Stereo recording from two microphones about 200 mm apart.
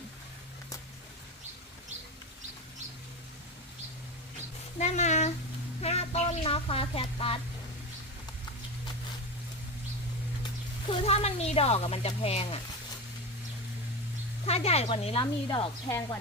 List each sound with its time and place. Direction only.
4.8 s a sound: 35° left (ahead or behind)
10.9 s speech: 30° left (ahead or behind)
14.4 s speech: 30° left (ahead or behind)